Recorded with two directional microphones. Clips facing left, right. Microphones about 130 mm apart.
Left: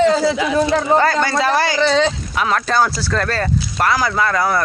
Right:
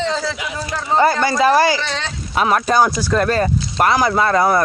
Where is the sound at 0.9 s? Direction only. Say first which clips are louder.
Right 1 dB; 15° right (ahead or behind).